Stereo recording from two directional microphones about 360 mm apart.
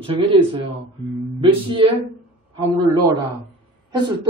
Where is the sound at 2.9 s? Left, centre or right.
Centre.